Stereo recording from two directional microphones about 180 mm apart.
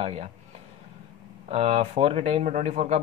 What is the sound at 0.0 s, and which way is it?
Speech, 35° right (ahead or behind).